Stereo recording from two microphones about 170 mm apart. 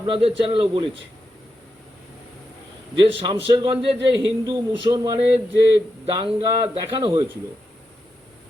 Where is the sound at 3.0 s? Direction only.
30° right (ahead or behind).